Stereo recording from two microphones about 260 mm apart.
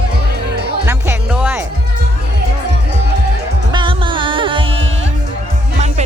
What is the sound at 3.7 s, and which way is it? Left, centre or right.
Music, centre.